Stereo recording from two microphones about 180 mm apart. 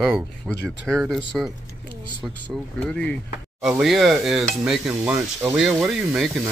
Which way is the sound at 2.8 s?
5° left (ahead or behind).